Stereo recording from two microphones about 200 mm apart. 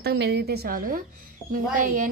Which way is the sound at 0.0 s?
60° right (ahead or behind).